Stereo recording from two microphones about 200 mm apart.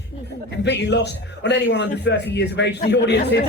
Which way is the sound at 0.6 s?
60° left (ahead or behind).